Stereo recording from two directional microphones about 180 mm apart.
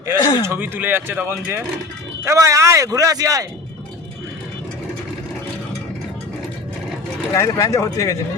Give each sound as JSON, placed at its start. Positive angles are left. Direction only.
{"t": 0.1, "sound": "speech", "side_deg": -15}
{"t": 7.3, "sound": "speech", "side_deg": 15}